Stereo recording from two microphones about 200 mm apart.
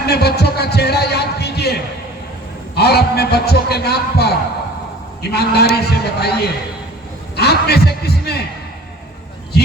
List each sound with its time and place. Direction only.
0.0 s a man's voice: 55° left (ahead or behind)